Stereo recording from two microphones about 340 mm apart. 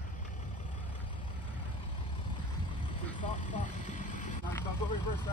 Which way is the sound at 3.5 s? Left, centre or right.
Left.